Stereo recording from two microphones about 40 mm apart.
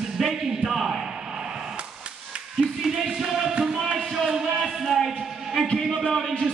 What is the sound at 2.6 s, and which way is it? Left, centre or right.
Music, centre.